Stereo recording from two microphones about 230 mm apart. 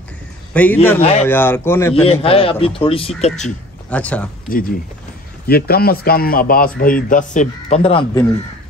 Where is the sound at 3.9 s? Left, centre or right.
Centre.